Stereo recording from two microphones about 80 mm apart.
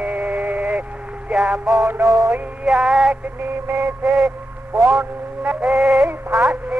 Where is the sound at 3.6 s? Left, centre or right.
Right; by 6.1 s centre.